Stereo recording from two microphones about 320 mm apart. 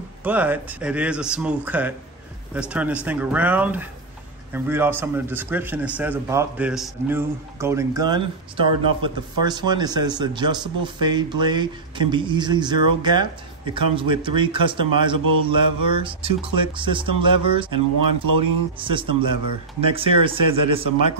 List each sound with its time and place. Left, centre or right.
0.2 s a man's voice: centre
17.7 s speech: right
18.8 s a man's voice: centre